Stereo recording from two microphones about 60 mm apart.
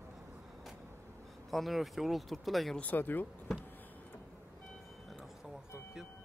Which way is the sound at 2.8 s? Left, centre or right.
Left.